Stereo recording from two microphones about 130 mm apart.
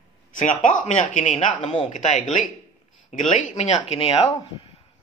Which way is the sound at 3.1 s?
75° left (ahead or behind).